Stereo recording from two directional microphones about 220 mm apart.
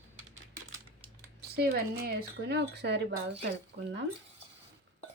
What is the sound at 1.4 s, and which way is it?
Speech, 45° right (ahead or behind).